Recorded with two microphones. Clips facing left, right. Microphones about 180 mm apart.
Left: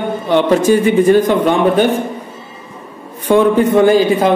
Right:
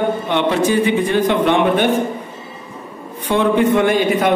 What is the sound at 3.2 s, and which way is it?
A man's voice, 45° left (ahead or behind).